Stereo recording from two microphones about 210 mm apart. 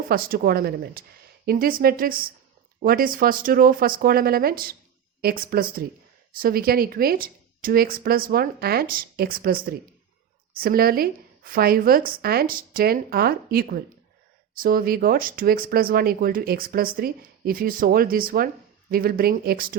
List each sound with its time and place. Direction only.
0.1 s speech: 45° right (ahead or behind)